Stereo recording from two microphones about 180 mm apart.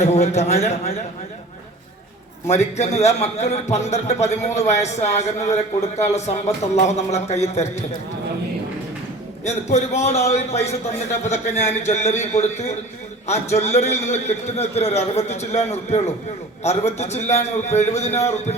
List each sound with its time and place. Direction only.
0.0 s a man's voice: 40° left (ahead or behind)
2.5 s a man's voice: 40° left (ahead or behind)
9.4 s a man's voice: 40° left (ahead or behind)